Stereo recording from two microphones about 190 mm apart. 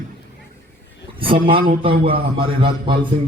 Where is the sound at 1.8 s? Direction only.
30° right (ahead or behind).